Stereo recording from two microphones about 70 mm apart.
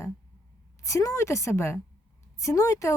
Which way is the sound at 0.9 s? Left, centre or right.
Left.